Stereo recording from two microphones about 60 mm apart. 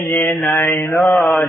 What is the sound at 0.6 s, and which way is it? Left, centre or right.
Mantra, left.